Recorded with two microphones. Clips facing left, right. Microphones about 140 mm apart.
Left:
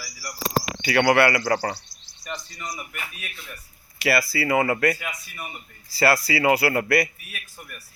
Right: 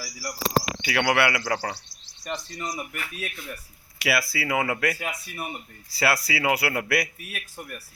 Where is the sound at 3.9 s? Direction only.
Centre (ahead or behind).